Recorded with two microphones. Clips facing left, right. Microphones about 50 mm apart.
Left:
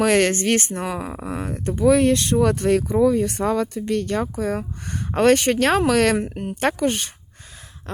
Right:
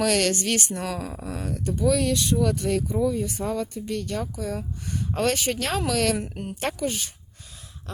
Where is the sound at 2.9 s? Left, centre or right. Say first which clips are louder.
Left 7 dB; left.